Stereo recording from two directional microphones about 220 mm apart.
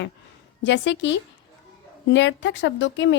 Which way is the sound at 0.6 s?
55° left (ahead or behind).